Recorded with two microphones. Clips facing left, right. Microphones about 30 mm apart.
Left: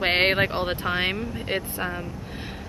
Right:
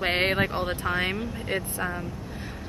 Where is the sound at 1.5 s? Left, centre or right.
Centre.